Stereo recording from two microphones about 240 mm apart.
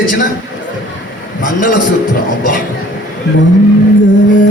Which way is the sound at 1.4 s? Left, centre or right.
Left.